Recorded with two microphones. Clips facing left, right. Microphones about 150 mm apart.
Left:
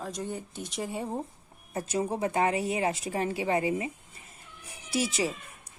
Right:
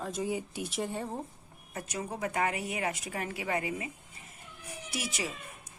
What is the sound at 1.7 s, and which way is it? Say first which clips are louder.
A woman's voice: left 7 dB; 30° left (ahead or behind).